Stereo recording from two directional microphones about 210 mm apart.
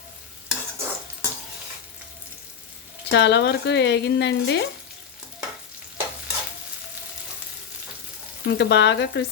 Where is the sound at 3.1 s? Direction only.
55° left (ahead or behind).